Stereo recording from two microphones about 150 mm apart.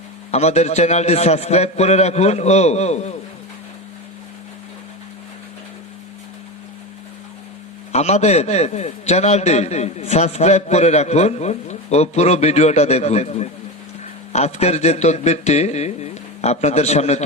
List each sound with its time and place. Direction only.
0.3 s a man's voice: 45° left (ahead or behind)
7.9 s a man's voice: 45° left (ahead or behind)